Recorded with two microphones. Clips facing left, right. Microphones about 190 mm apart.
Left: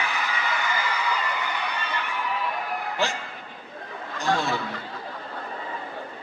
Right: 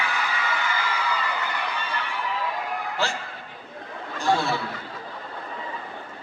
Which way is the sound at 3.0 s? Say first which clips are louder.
Left 1 dB; 15° left (ahead or behind).